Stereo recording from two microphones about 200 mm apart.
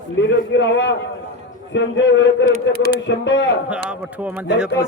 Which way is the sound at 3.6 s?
5° right (ahead or behind).